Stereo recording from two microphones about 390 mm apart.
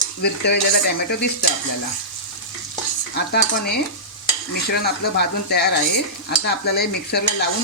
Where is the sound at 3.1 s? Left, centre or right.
Left.